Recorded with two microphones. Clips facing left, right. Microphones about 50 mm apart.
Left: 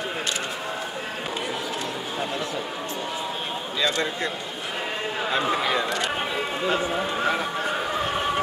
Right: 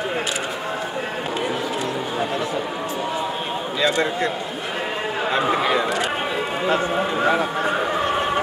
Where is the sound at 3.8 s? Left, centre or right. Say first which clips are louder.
Right 5 dB; centre.